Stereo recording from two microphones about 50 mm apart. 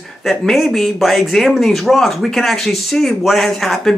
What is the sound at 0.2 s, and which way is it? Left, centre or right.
A woman's voice, centre.